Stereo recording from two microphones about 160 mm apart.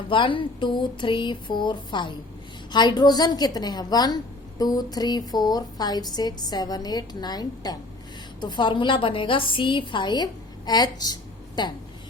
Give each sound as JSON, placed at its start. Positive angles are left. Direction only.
{"t": 0.1, "sound": "a woman's voice", "side_deg": 30}